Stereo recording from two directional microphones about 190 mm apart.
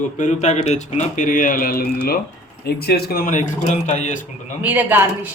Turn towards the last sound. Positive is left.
turn(degrees=-10)  # may be behind; listen again after turning